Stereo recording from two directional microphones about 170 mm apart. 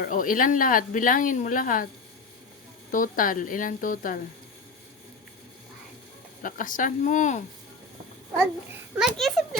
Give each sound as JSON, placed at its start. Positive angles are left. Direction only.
{"t": 0.0, "sound": "speech", "side_deg": 55}
{"t": 2.9, "sound": "speech", "side_deg": 55}
{"t": 6.4, "sound": "speech", "side_deg": 50}
{"t": 9.0, "sound": "a child's voice", "side_deg": 0}